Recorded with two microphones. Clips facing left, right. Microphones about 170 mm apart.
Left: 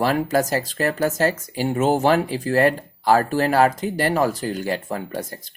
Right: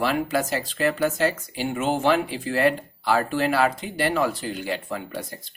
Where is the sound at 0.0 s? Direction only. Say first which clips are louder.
Left 4 dB; 45° left (ahead or behind).